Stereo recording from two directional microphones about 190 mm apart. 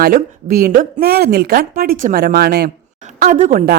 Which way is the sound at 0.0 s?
50° right (ahead or behind).